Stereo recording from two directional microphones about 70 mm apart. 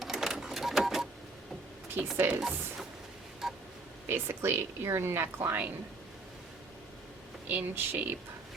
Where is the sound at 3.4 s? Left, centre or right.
Centre.